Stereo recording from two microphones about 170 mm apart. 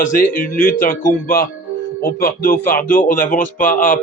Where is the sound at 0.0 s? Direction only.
55° left (ahead or behind).